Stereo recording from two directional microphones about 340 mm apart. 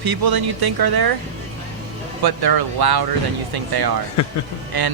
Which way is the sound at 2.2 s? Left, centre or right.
Right.